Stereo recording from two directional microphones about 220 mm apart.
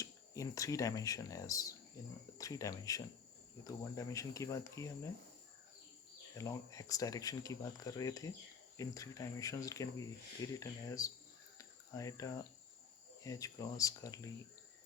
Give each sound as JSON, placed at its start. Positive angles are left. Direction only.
{"t": 0.0, "sound": "speech", "side_deg": 15}
{"t": 6.3, "sound": "speech", "side_deg": 15}
{"t": 11.5, "sound": "cricket", "side_deg": 15}
{"t": 13.2, "sound": "speech", "side_deg": 15}